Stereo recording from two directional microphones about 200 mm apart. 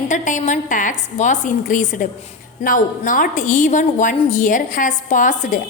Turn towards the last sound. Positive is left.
turn(degrees=40)  # may be behind; listen again after turning